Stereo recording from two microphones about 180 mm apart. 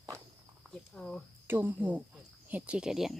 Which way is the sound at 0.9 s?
5° left (ahead or behind).